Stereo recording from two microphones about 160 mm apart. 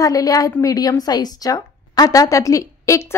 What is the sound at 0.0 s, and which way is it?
A woman's voice, 20° left (ahead or behind).